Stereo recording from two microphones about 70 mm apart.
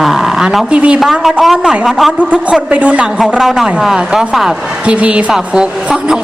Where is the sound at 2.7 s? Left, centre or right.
Centre.